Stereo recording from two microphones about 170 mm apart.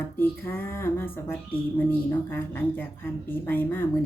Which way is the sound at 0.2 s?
10° left (ahead or behind).